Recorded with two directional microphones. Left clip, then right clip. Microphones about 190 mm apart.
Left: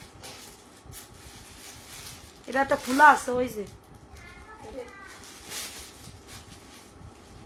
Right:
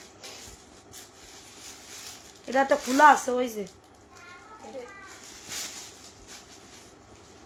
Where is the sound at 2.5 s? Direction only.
20° right (ahead or behind).